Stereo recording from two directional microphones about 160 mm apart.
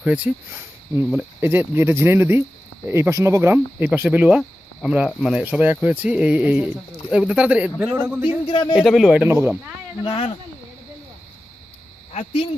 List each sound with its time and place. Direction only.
0.0 s speech: 5° right (ahead or behind)
8.7 s speech: centre (ahead or behind)
10.0 s speech: 35° left (ahead or behind)
12.1 s speech: 40° left (ahead or behind)